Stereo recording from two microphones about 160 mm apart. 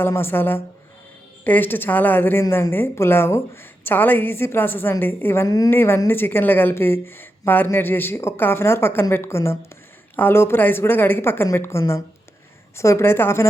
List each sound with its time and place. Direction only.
0.0 s a woman's voice: 15° left (ahead or behind)